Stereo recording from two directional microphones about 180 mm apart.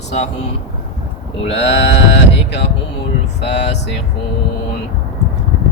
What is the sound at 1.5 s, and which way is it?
Sheep, 75° left (ahead or behind).